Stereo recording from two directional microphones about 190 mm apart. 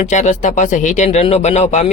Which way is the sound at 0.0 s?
40° left (ahead or behind).